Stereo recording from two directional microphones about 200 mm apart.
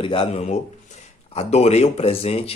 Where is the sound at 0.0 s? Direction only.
25° left (ahead or behind).